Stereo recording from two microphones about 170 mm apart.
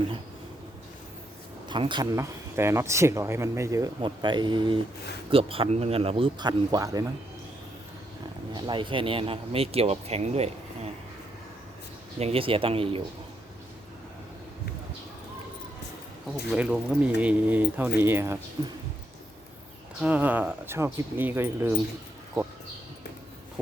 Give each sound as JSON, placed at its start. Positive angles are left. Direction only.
{"t": 1.7, "sound": "speech", "side_deg": -25}
{"t": 2.1, "sound": "speech", "side_deg": -15}
{"t": 8.5, "sound": "speech", "side_deg": -30}
{"t": 12.2, "sound": "speech", "side_deg": -35}
{"t": 16.5, "sound": "speech", "side_deg": -5}
{"t": 18.6, "sound": "speech", "side_deg": -25}
{"t": 20.0, "sound": "speech", "side_deg": -10}